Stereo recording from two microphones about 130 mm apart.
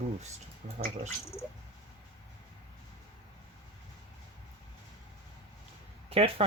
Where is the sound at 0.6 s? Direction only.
90° right.